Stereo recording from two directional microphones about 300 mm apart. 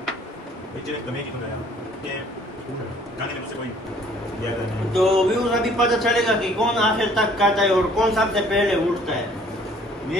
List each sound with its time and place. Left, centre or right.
4.9 s a man's voice: centre